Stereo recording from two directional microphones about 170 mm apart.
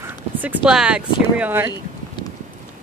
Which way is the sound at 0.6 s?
5° right (ahead or behind).